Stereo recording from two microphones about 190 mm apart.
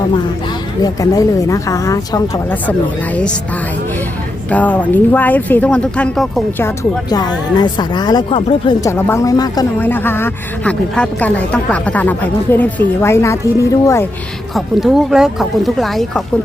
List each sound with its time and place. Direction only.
0.8 s speech: 20° left (ahead or behind)
4.4 s speech: 10° left (ahead or behind)
6.6 s speech: 15° left (ahead or behind)
8.8 s speech: 10° left (ahead or behind)
14.5 s speech: centre (ahead or behind)